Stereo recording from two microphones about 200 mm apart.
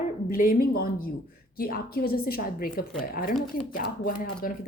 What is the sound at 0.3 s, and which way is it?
Speech, 45° left (ahead or behind).